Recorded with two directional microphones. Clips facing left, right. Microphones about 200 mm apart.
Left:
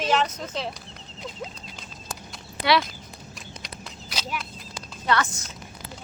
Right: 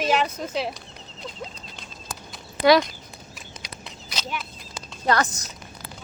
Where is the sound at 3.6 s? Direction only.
5° left (ahead or behind).